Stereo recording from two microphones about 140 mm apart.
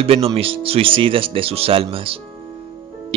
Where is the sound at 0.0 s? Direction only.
45° right (ahead or behind).